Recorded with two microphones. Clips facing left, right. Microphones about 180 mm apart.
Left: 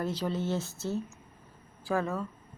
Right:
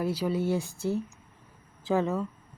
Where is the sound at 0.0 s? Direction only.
10° right (ahead or behind).